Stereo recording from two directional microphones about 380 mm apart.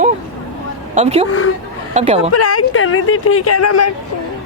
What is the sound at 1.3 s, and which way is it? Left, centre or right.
Speech, left.